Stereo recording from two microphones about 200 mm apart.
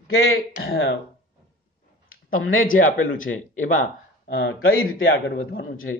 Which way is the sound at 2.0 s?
45° left (ahead or behind).